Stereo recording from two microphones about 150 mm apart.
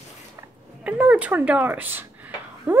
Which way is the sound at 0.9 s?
10° right (ahead or behind).